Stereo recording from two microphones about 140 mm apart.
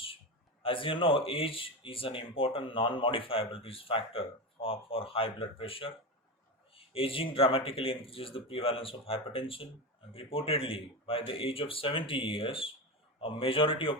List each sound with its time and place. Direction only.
0.6 s speech: 40° left (ahead or behind)
6.9 s speech: 40° left (ahead or behind)